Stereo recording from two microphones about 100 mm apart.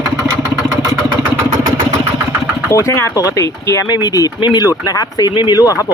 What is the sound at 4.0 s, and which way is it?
Speech, 40° left (ahead or behind).